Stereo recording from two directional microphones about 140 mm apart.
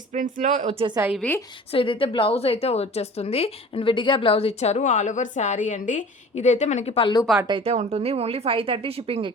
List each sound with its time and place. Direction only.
0.1 s speech: 65° right (ahead or behind)
0.7 s speech: 45° right (ahead or behind)
1.2 s a woman's voice: 10° left (ahead or behind)
1.7 s a woman's voice: 40° left (ahead or behind)
7.4 s speech: 35° right (ahead or behind)
7.7 s speech: 50° right (ahead or behind)